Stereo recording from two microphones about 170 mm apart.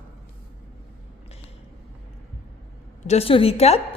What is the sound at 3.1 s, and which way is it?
Speech, 35° left (ahead or behind).